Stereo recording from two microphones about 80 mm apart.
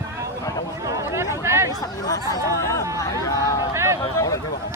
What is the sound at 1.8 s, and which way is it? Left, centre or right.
Speech, left.